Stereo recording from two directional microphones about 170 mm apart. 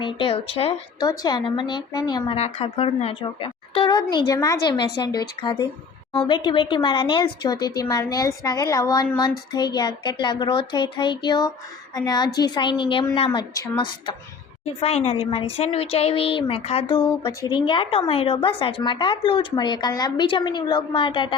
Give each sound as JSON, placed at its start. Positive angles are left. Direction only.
{"t": 0.0, "sound": "speech", "side_deg": 30}
{"t": 2.3, "sound": "a woman's voice", "side_deg": 35}